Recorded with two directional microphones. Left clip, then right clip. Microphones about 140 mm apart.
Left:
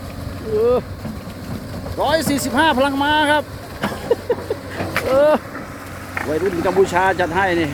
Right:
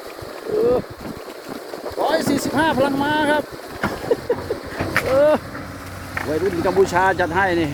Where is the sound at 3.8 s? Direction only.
5° left (ahead or behind).